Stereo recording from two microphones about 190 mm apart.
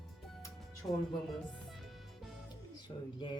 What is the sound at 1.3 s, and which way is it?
Music, centre (ahead or behind).